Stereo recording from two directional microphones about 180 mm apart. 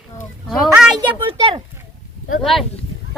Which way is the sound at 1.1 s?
30° right (ahead or behind).